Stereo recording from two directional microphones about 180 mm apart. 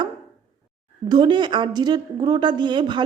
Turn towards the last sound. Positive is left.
turn(degrees=-25)  # may be behind; listen again after turning